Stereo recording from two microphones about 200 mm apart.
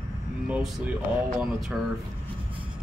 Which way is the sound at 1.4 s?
Centre (ahead or behind).